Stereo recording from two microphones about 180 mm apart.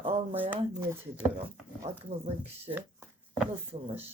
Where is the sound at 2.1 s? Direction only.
35° right (ahead or behind).